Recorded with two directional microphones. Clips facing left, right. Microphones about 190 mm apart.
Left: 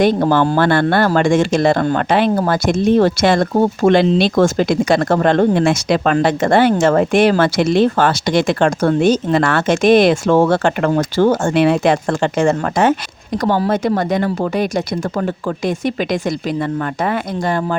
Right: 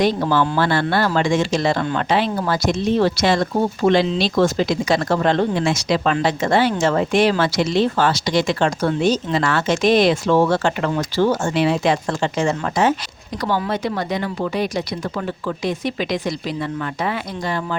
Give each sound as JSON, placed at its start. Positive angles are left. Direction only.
{"t": 0.0, "sound": "speech", "side_deg": 55}